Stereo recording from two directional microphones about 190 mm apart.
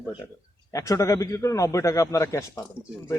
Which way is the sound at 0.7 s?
15° left (ahead or behind).